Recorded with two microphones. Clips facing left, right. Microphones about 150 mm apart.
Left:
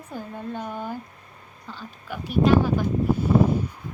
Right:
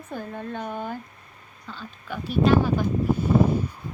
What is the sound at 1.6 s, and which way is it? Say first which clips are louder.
A woman's voice: even; 15° left (ahead or behind).